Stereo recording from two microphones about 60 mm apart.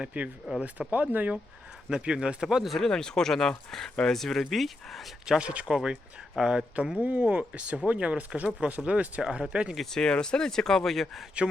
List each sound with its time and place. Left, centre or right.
0.0 s speech: right
2.7 s speech: centre
5.2 s speech: centre
6.8 s speech: right
9.7 s speech: centre